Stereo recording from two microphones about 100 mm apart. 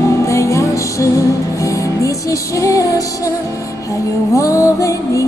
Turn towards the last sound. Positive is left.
turn(degrees=35)  # may be behind; listen again after turning